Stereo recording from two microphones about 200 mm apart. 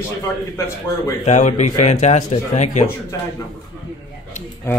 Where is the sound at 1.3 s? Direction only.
35° left (ahead or behind).